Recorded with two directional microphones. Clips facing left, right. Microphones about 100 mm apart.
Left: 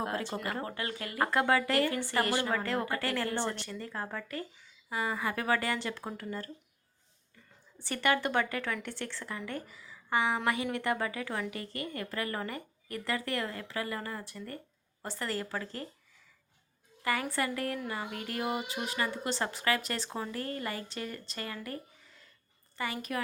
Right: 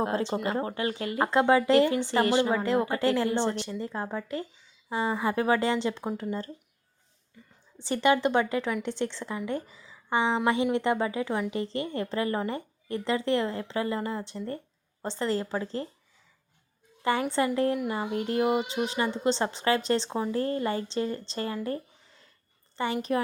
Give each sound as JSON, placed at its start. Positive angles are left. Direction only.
{"t": 0.0, "sound": "speech", "side_deg": -25}
{"t": 7.8, "sound": "speech", "side_deg": -20}
{"t": 17.0, "sound": "speech", "side_deg": -25}